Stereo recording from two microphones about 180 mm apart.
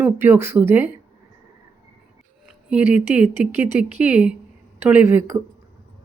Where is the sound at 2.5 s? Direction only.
5° right (ahead or behind).